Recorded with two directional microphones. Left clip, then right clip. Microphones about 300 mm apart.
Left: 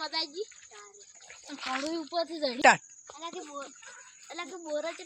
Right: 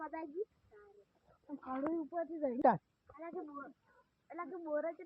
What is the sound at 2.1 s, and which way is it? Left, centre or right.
Speech, centre.